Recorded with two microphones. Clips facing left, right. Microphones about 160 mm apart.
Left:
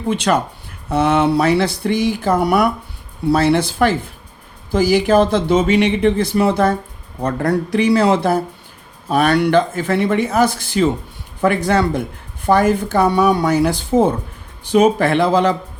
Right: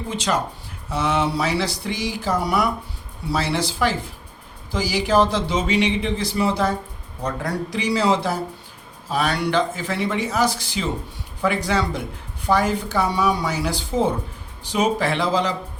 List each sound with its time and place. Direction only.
0.1 s speech: 60° left (ahead or behind)